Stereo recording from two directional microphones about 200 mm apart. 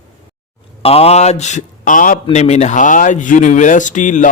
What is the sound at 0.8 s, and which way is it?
A man's voice, 30° left (ahead or behind).